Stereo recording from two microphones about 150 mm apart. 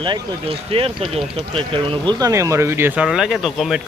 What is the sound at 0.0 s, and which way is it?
Speech, 35° right (ahead or behind).